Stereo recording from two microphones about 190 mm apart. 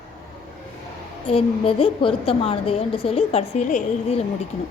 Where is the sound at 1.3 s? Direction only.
30° left (ahead or behind).